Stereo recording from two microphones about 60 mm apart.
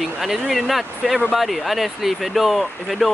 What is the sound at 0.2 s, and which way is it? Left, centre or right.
Speech, centre.